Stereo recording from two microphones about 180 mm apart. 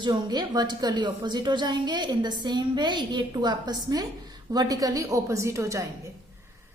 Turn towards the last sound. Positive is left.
turn(degrees=-15)  # may be behind; listen again after turning